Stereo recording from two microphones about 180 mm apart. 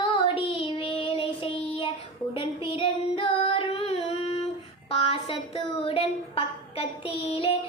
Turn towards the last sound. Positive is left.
turn(degrees=30)  # may be behind; listen again after turning